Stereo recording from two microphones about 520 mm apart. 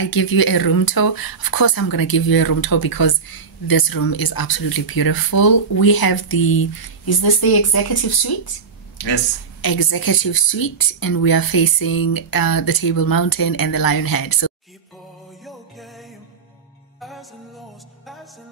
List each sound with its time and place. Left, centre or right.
0.0 s speech: left